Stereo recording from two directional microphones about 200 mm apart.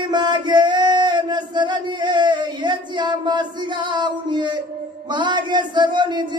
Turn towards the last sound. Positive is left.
turn(degrees=-20)  # may be behind; listen again after turning